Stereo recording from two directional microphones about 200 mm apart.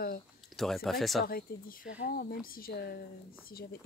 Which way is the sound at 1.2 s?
45° left (ahead or behind).